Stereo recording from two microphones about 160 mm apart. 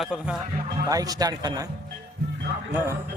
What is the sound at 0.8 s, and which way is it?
Speech, 20° right (ahead or behind).